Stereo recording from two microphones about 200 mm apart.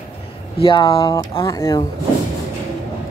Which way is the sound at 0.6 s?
25° left (ahead or behind).